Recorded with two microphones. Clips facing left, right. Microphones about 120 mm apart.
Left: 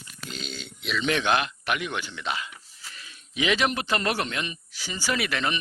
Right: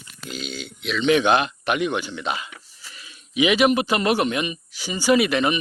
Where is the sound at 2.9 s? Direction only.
5° right (ahead or behind).